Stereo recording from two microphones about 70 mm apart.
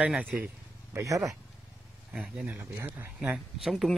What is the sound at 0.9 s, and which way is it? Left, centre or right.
Speech, right.